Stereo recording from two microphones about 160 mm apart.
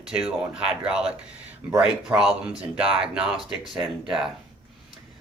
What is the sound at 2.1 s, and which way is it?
Speech, 5° right (ahead or behind).